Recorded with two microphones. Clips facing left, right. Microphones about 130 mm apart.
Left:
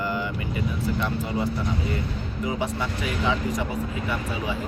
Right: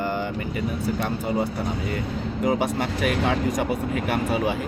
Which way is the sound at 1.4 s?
50° right (ahead or behind).